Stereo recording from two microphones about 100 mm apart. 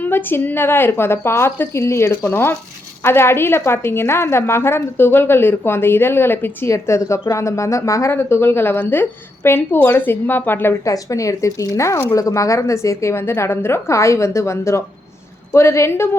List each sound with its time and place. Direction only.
0.0 s a woman's voice: 20° left (ahead or behind)
10.8 s a woman's voice: 35° left (ahead or behind)